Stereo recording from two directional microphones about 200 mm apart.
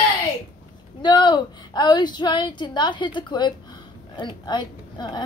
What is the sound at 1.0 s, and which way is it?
A woman's voice, 20° left (ahead or behind).